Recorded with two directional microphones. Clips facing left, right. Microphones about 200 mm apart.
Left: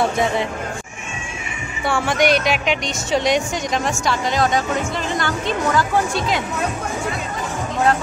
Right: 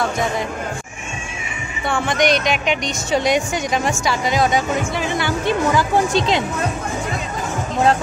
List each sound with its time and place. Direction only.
2.0 s a woman's voice: 5° left (ahead or behind); by 5.9 s 10° right (ahead or behind)
6.1 s speech: 25° right (ahead or behind)